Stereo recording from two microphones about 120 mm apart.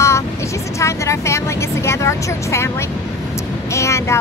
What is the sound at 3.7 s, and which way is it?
Speech, 25° left (ahead or behind).